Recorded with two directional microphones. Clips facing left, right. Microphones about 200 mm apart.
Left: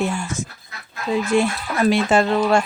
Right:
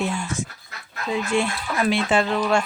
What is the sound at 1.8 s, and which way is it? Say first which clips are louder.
Speech: left 5 dB; 40° left (ahead or behind).